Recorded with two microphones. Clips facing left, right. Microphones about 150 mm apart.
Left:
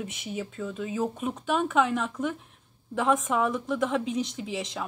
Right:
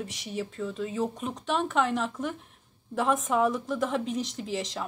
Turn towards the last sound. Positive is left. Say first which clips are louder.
# even
turn(degrees=0)  # may be behind; listen again after turning